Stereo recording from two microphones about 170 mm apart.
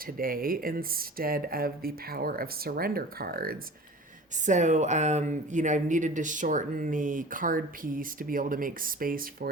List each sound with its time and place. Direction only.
0.2 s speech: 60° right (ahead or behind)
4.4 s speech: 45° right (ahead or behind)